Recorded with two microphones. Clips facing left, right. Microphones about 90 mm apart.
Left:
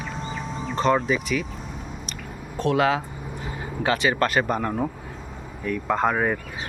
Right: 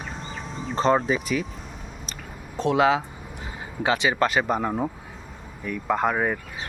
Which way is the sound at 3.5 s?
15° right (ahead or behind).